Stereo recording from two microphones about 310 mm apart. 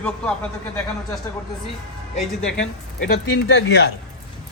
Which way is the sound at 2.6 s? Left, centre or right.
Left.